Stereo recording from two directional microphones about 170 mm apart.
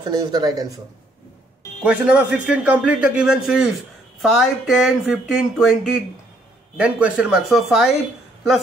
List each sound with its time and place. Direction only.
0.0 s speech: 25° right (ahead or behind)
1.8 s a man's voice: 5° right (ahead or behind)